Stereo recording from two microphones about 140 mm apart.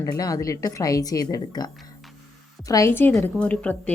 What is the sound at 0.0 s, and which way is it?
A woman's voice, 25° left (ahead or behind).